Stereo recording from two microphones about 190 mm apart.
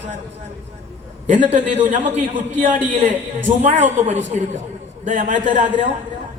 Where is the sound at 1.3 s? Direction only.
40° right (ahead or behind).